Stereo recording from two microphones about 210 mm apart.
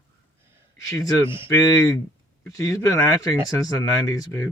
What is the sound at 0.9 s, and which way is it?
Speech, 15° left (ahead or behind).